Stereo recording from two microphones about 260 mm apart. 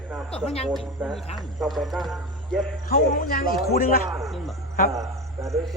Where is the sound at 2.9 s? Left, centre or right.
Left.